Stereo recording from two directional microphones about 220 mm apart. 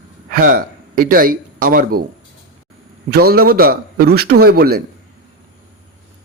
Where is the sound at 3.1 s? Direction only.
45° right (ahead or behind).